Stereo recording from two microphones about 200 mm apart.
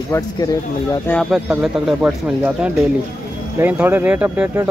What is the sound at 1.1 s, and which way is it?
Speech, centre (ahead or behind).